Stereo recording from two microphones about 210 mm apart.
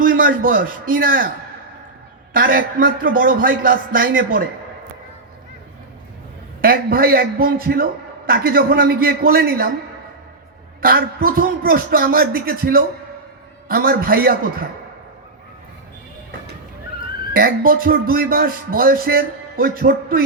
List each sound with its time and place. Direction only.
0.0 s a man's voice: 40° right (ahead or behind)
2.3 s a man's voice: 40° right (ahead or behind)
6.6 s speech: 45° right (ahead or behind)
10.8 s speech: 45° right (ahead or behind)
17.3 s speech: 45° right (ahead or behind)